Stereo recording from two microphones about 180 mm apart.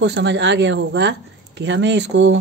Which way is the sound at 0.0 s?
75° right (ahead or behind).